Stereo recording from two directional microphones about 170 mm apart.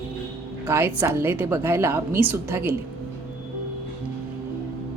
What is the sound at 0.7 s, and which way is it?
A woman's voice, 15° right (ahead or behind).